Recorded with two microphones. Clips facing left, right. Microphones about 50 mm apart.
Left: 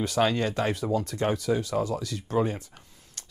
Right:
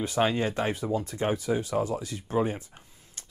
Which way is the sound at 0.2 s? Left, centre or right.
Right.